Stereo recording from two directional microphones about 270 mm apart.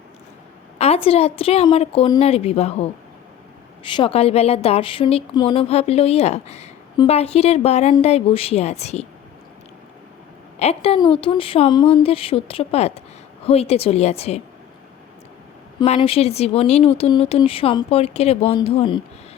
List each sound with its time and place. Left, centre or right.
0.8 s speech: left
3.9 s speech: left
10.6 s speech: left
15.8 s speech: centre